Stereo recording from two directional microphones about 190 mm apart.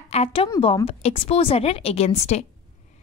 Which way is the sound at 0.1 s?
30° left (ahead or behind).